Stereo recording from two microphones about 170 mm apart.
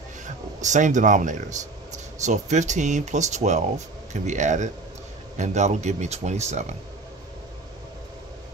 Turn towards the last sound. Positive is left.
turn(degrees=-40)  # may be behind; listen again after turning